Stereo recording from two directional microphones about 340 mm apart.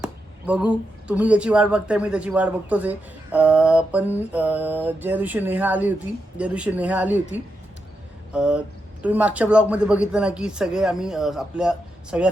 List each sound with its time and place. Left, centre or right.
0.0 s speech: centre
8.3 s speech: centre